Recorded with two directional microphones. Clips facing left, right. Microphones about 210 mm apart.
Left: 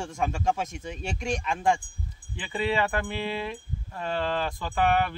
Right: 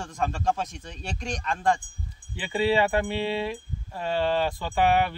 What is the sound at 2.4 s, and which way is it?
Speech, 30° right (ahead or behind).